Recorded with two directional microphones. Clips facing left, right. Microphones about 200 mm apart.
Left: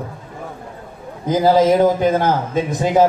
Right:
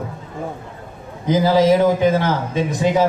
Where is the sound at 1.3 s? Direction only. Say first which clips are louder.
Left 1 dB; 50° left (ahead or behind).